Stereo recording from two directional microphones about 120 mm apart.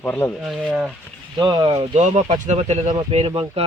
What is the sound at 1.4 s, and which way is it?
Speech, 35° right (ahead or behind).